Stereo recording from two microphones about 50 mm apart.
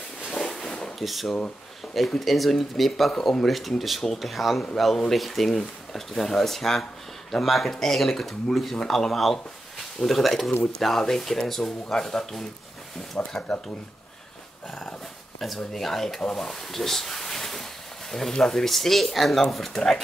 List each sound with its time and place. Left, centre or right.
0.4 s a sound: centre
0.7 s drawer open or close: centre
0.9 s speech: centre
15.4 s speech: centre